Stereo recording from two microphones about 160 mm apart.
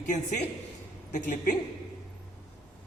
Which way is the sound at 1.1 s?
55° left (ahead or behind).